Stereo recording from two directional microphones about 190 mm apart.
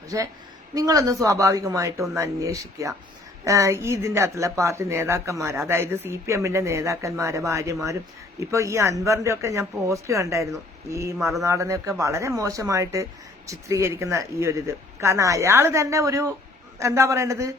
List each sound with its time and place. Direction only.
0.1 s speech: 15° right (ahead or behind)